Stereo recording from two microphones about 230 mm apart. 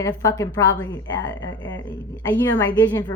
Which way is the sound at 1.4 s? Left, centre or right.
Left.